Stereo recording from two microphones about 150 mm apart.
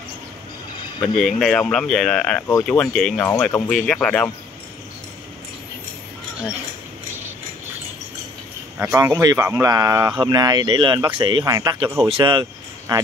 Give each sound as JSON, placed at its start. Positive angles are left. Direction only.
{"t": 1.0, "sound": "speech", "side_deg": 5}
{"t": 8.7, "sound": "speech", "side_deg": -15}